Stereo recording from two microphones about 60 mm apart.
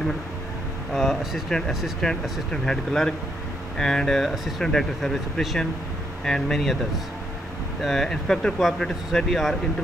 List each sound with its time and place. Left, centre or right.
0.9 s speech: centre
7.8 s speech: centre
8.5 s speech: centre